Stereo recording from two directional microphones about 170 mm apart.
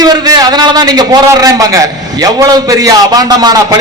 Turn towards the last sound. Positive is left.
turn(degrees=-20)  # may be behind; listen again after turning